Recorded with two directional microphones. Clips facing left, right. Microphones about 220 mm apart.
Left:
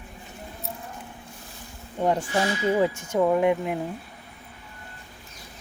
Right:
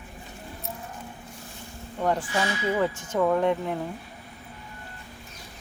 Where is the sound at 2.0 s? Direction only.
20° left (ahead or behind).